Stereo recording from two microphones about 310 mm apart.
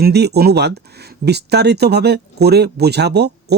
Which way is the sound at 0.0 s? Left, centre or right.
Right.